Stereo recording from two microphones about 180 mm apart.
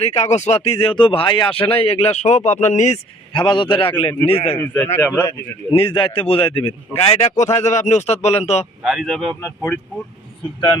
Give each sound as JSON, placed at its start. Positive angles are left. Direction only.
{"t": 0.0, "sound": "speech", "side_deg": 35}
{"t": 3.3, "sound": "a man's voice", "side_deg": 25}
{"t": 4.5, "sound": "speech", "side_deg": 10}
{"t": 5.7, "sound": "speech", "side_deg": 30}
{"t": 8.8, "sound": "speech", "side_deg": 0}